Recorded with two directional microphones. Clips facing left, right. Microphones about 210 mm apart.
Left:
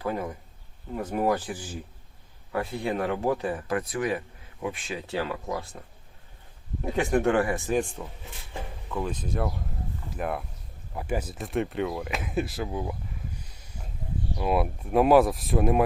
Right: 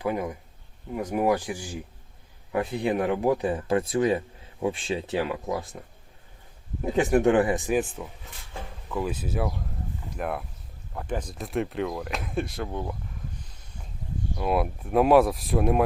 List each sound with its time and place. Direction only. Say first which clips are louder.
0.0 s speech: right 2 dB; 15° right (ahead or behind)
6.9 s speech: right 3 dB; 15° right (ahead or behind)
7.8 s speech: right 1 dB; centre (ahead or behind)
14.3 s speech: even; centre (ahead or behind)